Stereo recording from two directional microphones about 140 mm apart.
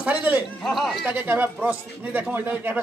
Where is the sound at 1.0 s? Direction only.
10° right (ahead or behind).